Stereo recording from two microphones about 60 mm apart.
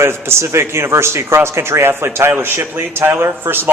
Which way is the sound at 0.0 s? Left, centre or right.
Right.